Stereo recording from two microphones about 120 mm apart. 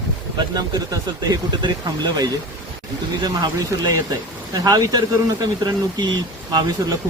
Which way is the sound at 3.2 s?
30° right (ahead or behind).